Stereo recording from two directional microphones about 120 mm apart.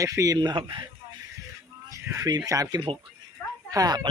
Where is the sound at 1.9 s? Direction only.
30° right (ahead or behind).